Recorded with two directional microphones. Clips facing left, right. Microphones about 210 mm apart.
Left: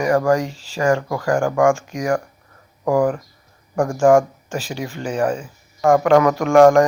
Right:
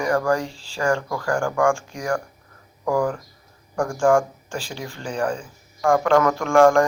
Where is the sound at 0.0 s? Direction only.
20° left (ahead or behind).